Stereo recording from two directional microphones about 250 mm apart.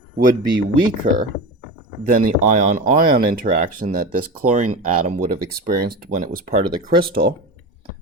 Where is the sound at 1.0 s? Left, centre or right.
Right.